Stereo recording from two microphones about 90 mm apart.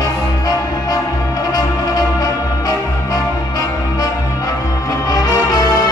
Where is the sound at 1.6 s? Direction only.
45° left (ahead or behind).